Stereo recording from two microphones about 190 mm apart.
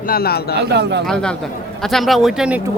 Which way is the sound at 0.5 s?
60° right (ahead or behind).